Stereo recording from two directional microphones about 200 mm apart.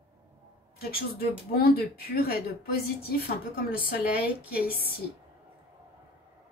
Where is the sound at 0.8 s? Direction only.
50° left (ahead or behind).